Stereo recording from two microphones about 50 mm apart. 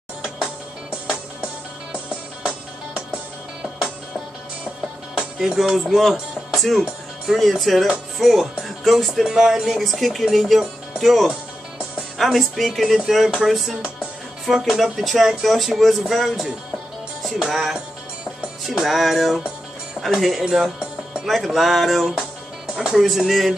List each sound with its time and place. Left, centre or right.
1.4 s music: right
5.1 s music: centre
5.9 s speech: centre
18.7 s speech: centre